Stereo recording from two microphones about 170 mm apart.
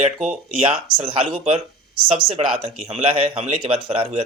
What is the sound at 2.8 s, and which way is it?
Speech, 35° right (ahead or behind).